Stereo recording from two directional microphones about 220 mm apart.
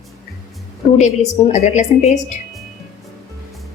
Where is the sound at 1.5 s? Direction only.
30° left (ahead or behind).